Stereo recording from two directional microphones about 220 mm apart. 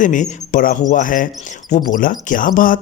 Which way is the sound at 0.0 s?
35° left (ahead or behind).